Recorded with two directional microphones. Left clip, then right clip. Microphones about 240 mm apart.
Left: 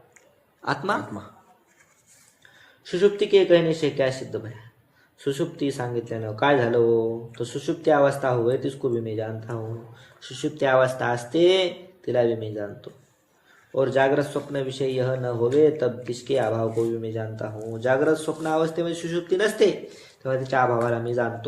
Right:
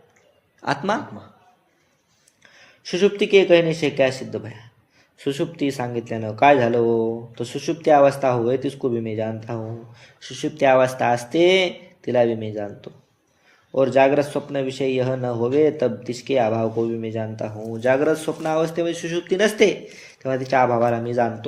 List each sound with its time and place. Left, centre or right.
0.6 s speech: right
2.8 s speech: right